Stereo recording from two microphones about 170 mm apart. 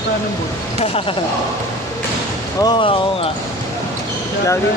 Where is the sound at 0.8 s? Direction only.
35° left (ahead or behind).